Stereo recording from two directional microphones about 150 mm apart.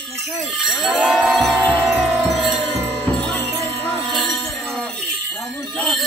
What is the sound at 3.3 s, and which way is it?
Music, 15° left (ahead or behind).